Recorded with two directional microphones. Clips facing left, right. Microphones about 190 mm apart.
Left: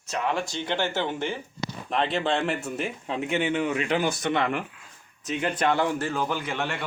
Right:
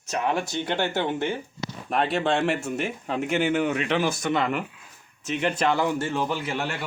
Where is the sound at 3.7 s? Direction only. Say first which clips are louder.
Even; 35° left (ahead or behind).